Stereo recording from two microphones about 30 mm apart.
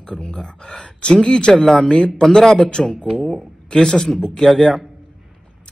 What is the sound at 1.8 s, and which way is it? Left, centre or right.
Speech, left.